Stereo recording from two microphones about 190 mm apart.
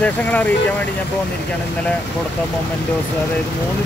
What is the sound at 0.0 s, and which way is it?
Speech, 10° left (ahead or behind).